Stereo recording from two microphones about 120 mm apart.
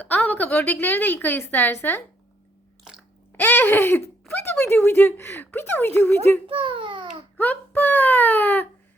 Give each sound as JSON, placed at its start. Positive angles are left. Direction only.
{"t": 0.0, "sound": "speech", "side_deg": 15}
{"t": 3.3, "sound": "a sound", "side_deg": 15}
{"t": 4.3, "sound": "speech", "side_deg": 20}
{"t": 6.5, "sound": "a child's voice", "side_deg": -45}
{"t": 7.3, "sound": "speech", "side_deg": 15}